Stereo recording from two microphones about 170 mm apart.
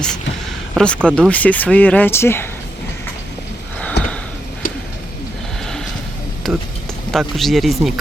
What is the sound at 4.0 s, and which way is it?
Sniff, 80° left.